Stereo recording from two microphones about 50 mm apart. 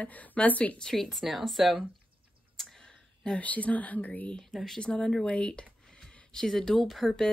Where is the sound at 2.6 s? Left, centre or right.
Centre.